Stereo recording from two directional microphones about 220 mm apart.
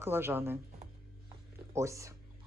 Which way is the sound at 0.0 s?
10° right (ahead or behind).